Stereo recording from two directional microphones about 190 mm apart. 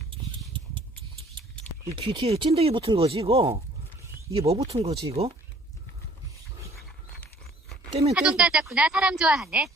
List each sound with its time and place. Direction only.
0.1 s a sound: 25° right (ahead or behind)
2.0 s speech: 25° right (ahead or behind)
8.1 s a woman's voice: 5° right (ahead or behind)